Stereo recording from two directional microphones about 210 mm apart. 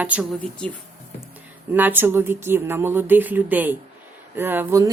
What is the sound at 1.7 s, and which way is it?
Speech, 10° right (ahead or behind).